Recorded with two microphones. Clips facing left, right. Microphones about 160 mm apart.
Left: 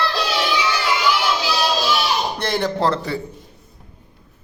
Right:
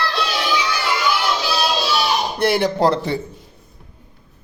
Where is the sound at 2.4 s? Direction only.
10° right (ahead or behind).